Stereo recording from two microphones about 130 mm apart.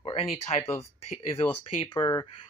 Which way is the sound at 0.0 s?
45° left (ahead or behind).